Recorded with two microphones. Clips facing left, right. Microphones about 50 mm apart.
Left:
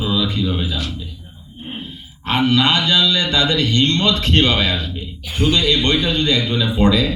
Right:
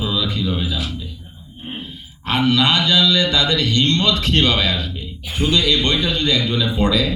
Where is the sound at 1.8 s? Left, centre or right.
Left.